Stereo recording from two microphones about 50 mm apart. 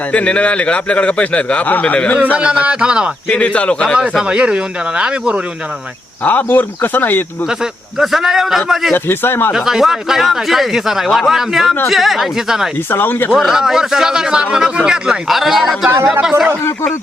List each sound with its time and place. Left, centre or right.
0.1 s a man's voice: left
2.2 s speech: right
3.2 s a man's voice: left
4.2 s a man's voice: centre
6.2 s speech: left
7.6 s a man's voice: centre
9.0 s speech: left
9.5 s speech: centre
12.9 s speech: left
13.3 s a man's voice: centre
15.3 s speech: centre